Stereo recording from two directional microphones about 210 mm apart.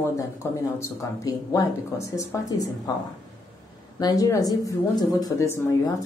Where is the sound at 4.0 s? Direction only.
15° left (ahead or behind).